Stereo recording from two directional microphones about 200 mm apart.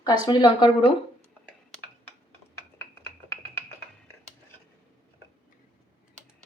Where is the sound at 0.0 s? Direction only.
20° left (ahead or behind).